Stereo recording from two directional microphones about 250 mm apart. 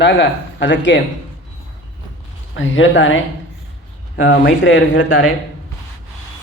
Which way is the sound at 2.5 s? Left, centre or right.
Left.